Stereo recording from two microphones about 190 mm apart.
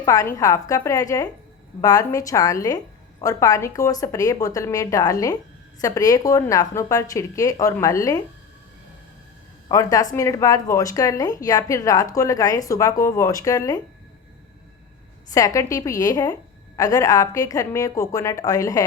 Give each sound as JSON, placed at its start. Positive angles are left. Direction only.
{"t": 0.0, "sound": "a woman's voice", "side_deg": 15}
{"t": 9.6, "sound": "a woman's voice", "side_deg": 20}
{"t": 15.3, "sound": "a woman's voice", "side_deg": 20}